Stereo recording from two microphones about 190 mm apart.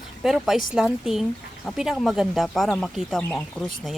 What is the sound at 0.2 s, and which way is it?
Speech, centre (ahead or behind).